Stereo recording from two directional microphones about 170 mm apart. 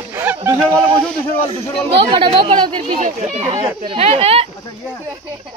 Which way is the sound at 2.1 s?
30° right (ahead or behind).